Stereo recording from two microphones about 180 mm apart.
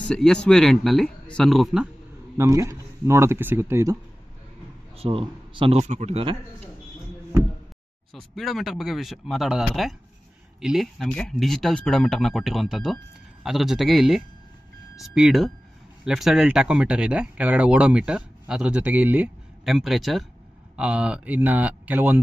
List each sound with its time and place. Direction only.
0.1 s speech: 5° left (ahead or behind)
2.3 s speech: 15° right (ahead or behind)
4.9 s a man's voice: 30° right (ahead or behind)
8.1 s speech: centre (ahead or behind)